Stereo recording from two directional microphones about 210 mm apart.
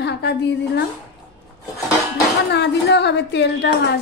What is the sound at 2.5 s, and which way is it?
A woman's voice, 55° left (ahead or behind).